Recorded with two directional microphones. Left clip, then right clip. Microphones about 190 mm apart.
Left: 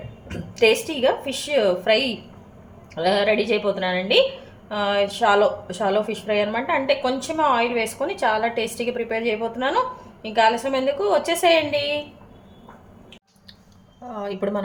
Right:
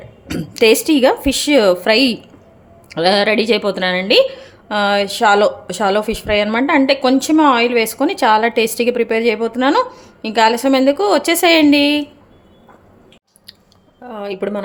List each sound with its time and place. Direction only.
0.3 s a woman's voice: 70° right (ahead or behind)
14.1 s a woman's voice: 55° right (ahead or behind)